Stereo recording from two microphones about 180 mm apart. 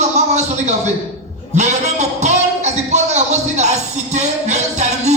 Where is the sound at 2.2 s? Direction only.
40° right (ahead or behind).